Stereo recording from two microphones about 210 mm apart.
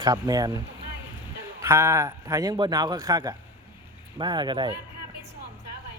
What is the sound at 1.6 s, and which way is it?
A man's voice, 10° right (ahead or behind).